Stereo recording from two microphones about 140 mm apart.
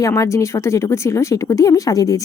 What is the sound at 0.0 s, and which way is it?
A woman's voice, 20° left (ahead or behind).